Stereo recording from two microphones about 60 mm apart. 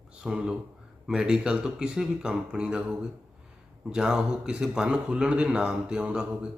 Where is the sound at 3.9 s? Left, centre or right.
Centre.